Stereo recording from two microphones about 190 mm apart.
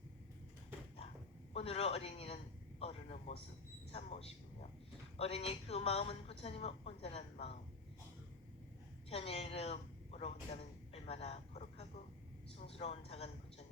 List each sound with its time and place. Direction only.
1.5 s a woman's voice: 30° left (ahead or behind)
9.0 s a sound: 30° left (ahead or behind)
12.6 s a man's voice: 30° left (ahead or behind)